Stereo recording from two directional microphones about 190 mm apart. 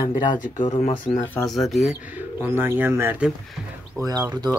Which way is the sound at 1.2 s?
5° left (ahead or behind).